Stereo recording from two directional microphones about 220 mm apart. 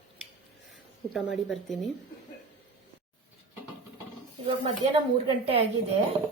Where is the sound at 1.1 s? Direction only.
Centre (ahead or behind).